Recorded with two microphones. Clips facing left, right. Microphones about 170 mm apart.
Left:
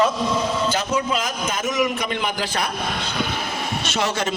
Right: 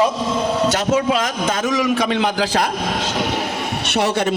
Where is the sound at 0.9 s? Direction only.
85° right; by 4.3 s 60° right (ahead or behind).